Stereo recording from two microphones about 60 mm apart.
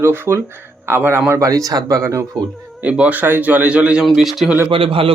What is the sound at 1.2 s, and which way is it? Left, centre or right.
Speech, right.